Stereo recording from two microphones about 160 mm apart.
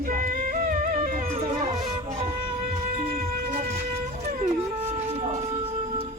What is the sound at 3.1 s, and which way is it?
Music, 55° right (ahead or behind).